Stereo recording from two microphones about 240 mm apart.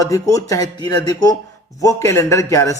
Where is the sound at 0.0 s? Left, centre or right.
Centre.